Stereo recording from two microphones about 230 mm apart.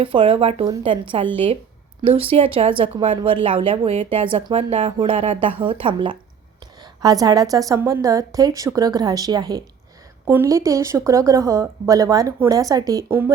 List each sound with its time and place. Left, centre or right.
0.0 s a woman's voice: right